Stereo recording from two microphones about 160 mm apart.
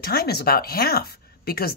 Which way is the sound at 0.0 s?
75° left (ahead or behind).